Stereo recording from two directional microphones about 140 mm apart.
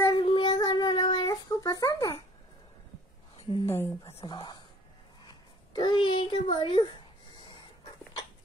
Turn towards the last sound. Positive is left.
turn(degrees=35)  # may be behind; listen again after turning